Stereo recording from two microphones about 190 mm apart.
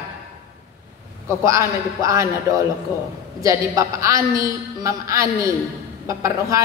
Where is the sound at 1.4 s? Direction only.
15° right (ahead or behind).